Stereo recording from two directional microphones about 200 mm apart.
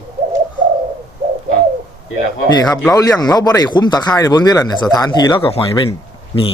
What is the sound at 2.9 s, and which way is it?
Speech, 20° left (ahead or behind).